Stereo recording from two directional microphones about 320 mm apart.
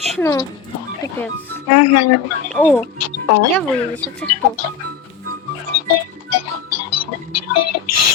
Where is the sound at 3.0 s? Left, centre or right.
Left.